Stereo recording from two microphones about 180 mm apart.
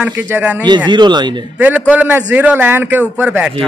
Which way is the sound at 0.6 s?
25° right (ahead or behind).